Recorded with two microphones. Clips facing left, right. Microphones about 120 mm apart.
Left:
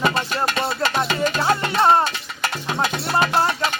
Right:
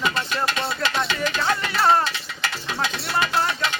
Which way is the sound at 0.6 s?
30° left (ahead or behind).